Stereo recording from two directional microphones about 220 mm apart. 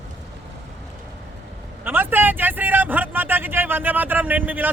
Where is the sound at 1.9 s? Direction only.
10° right (ahead or behind).